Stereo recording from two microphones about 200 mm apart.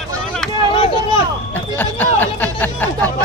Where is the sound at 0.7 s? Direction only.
25° left (ahead or behind).